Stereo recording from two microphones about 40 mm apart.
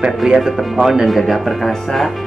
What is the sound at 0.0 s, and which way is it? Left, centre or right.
Speech, centre.